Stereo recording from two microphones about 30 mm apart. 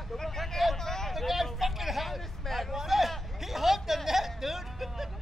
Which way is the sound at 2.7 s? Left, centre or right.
Centre.